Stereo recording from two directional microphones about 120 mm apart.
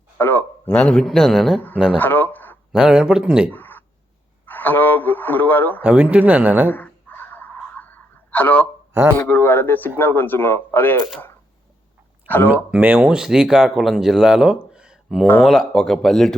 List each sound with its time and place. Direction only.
0.2 s a man's voice: 15° left (ahead or behind); by 2.0 s 5° right (ahead or behind)
2.0 s a sound: 15° left (ahead or behind)
2.7 s speech: 5° right (ahead or behind)
3.5 s a sound: 15° left (ahead or behind)
4.4 s speech: 15° left (ahead or behind)
5.8 s speech: 10° right (ahead or behind)
6.7 s a sound: 15° left (ahead or behind)
8.3 s a man's voice: 15° left (ahead or behind)
8.9 s speech: 25° right (ahead or behind)
9.1 s a man's voice: 15° left (ahead or behind)
12.7 s speech: 10° right (ahead or behind)